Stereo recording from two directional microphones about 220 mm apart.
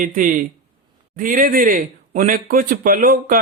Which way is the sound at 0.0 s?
35° right (ahead or behind).